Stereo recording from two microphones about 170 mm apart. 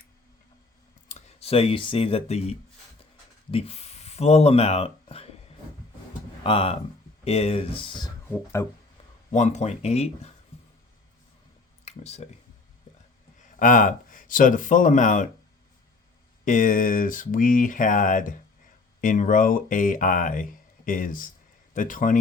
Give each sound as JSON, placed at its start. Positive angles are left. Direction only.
{"t": 1.0, "sound": "speech", "side_deg": 40}
{"t": 6.4, "sound": "speech", "side_deg": 35}
{"t": 8.6, "sound": "speech", "side_deg": 15}
{"t": 9.3, "sound": "speech", "side_deg": 45}
{"t": 11.9, "sound": "speech", "side_deg": 40}
{"t": 12.9, "sound": "a sound", "side_deg": 45}
{"t": 13.6, "sound": "speech", "side_deg": 50}
{"t": 16.5, "sound": "speech", "side_deg": 50}